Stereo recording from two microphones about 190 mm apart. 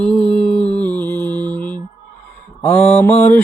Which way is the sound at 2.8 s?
10° left (ahead or behind).